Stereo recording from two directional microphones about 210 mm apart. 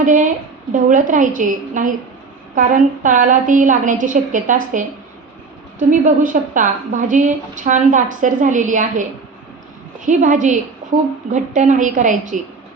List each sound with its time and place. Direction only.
0.0 s a woman's voice: 40° right (ahead or behind)
5.9 s a woman's voice: 35° right (ahead or behind)
10.1 s a woman's voice: 35° right (ahead or behind)